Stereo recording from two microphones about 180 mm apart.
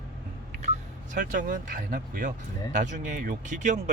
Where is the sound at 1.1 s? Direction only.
45° right (ahead or behind).